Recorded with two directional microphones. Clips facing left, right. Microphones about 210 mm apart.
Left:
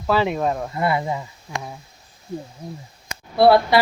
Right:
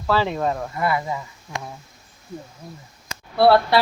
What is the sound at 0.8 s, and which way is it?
Speech, 25° left (ahead or behind).